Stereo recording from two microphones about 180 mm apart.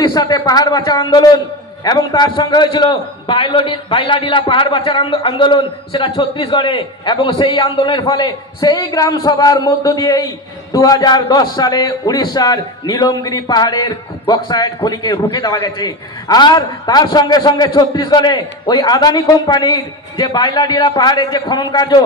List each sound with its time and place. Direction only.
0.0 s a man's voice: 20° left (ahead or behind)